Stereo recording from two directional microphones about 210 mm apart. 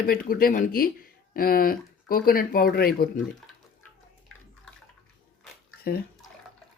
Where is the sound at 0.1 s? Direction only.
45° left (ahead or behind).